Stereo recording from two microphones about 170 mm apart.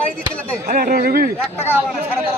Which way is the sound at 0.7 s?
60° right (ahead or behind).